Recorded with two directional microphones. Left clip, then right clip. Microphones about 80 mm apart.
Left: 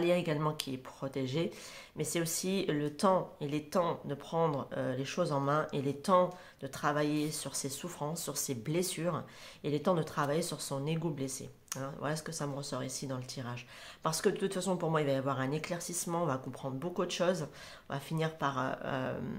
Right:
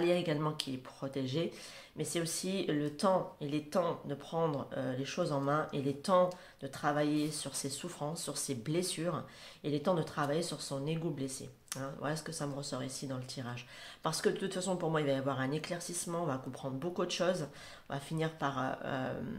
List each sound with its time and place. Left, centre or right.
0.0 s speech: left
16.6 s speech: left